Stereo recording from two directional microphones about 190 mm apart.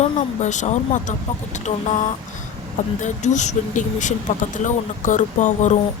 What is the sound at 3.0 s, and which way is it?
Speech, 40° left (ahead or behind).